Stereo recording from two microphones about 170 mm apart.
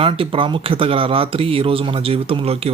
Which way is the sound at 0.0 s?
30° right (ahead or behind).